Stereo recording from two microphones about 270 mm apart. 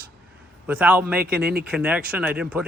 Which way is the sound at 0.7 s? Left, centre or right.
Centre.